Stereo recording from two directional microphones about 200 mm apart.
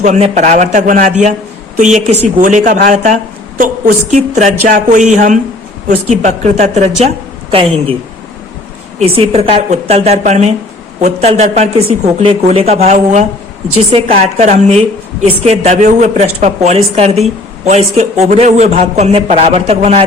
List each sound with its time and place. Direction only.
0.0 s a woman's voice: 35° right (ahead or behind)
9.0 s a woman's voice: 30° right (ahead or behind)
14.3 s a woman's voice: 35° right (ahead or behind)